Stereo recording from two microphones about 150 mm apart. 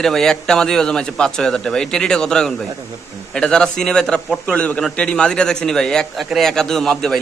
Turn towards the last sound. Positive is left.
turn(degrees=0)  # may be behind; listen again after turning